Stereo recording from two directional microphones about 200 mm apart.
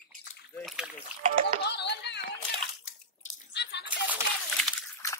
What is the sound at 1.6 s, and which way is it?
Music, 55° left (ahead or behind).